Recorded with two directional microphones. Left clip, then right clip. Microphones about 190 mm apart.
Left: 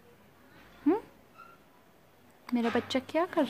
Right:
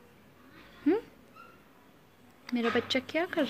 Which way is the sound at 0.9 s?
15° left (ahead or behind).